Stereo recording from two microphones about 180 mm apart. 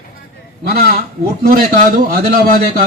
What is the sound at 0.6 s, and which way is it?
Speech, 55° right (ahead or behind).